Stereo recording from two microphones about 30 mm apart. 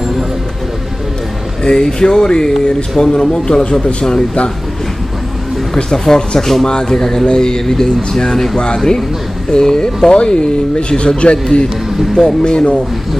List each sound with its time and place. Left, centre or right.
1.6 s speech: left
5.9 s a man's voice: centre; by 11.3 s left
12.2 s speech: left